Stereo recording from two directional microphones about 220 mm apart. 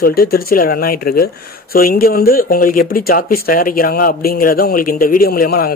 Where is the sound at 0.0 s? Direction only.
45° left (ahead or behind).